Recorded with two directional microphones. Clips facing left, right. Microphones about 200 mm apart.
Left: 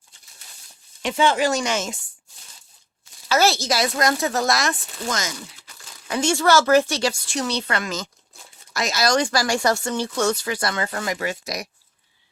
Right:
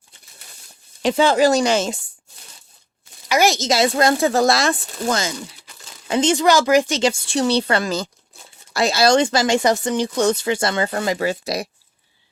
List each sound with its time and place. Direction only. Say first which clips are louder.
1.0 s speech: right 5 dB; 35° right (ahead or behind)
3.2 s speech: right 2 dB; 15° right (ahead or behind); by 5.3 s 30° right (ahead or behind)
6.1 s speech: right 3 dB; 20° right (ahead or behind)